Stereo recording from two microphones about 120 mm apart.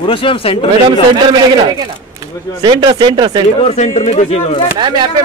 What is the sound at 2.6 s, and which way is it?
Speech, 35° right (ahead or behind).